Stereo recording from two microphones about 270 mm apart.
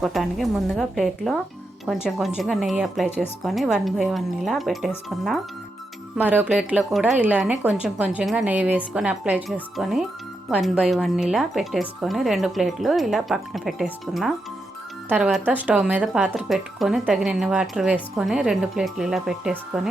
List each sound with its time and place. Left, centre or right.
0.0 s speech: centre